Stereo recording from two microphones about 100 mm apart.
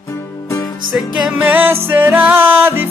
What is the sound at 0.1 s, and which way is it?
Music, 30° left (ahead or behind).